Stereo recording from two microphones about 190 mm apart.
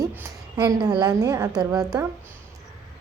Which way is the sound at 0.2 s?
20° right (ahead or behind).